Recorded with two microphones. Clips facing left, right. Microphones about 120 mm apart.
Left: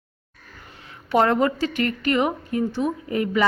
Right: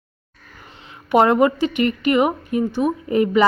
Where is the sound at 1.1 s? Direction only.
15° right (ahead or behind).